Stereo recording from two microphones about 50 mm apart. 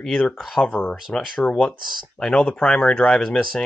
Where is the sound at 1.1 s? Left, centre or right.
Left.